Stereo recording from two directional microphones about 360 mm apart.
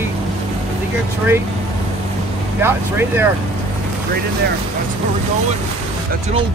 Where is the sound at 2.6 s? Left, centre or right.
Centre.